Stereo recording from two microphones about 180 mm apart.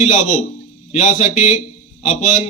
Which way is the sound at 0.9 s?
40° left (ahead or behind).